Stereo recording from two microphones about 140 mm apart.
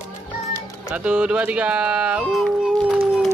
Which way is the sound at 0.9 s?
10° right (ahead or behind).